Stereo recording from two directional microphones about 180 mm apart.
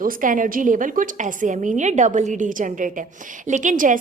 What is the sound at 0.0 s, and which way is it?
A woman's voice, 45° right (ahead or behind).